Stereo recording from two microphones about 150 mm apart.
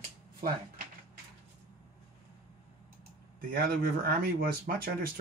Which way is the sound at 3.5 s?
85° right.